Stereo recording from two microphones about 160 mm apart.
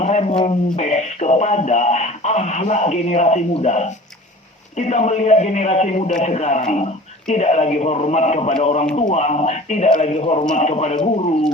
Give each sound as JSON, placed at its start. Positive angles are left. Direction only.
{"t": 0.0, "sound": "speech", "side_deg": 45}